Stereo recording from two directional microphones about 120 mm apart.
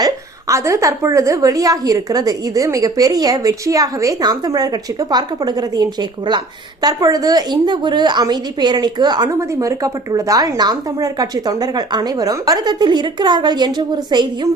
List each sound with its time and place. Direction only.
0.0 s a woman's voice: 25° right (ahead or behind)